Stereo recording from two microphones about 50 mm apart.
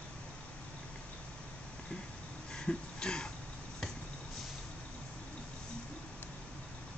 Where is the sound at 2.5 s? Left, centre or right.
Centre.